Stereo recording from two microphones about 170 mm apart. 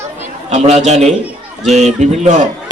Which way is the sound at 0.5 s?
40° right (ahead or behind).